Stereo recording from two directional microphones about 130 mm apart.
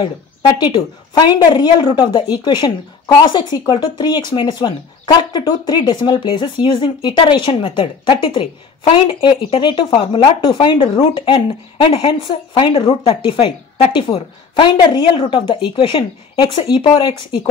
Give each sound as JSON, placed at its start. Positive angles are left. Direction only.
{"t": 0.6, "sound": "speech", "side_deg": 35}